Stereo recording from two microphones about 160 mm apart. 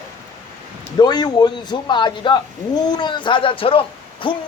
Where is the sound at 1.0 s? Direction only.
25° left (ahead or behind).